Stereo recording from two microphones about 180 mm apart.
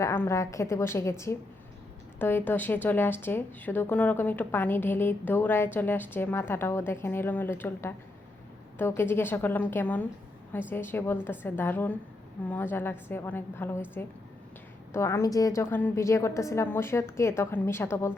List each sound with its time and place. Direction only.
0.0 s speech: 15° left (ahead or behind)
14.9 s speech: 15° left (ahead or behind)